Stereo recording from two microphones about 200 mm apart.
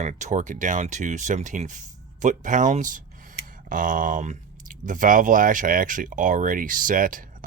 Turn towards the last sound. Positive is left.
turn(degrees=-45)  # may be behind; listen again after turning